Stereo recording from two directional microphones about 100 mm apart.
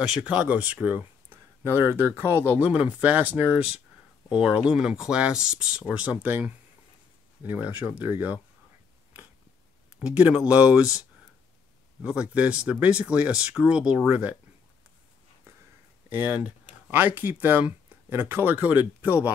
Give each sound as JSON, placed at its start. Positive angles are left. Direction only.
{"t": 0.0, "sound": "speech", "side_deg": -10}
{"t": 9.9, "sound": "speech", "side_deg": -15}
{"t": 12.0, "sound": "speech", "side_deg": -10}
{"t": 16.1, "sound": "speech", "side_deg": -20}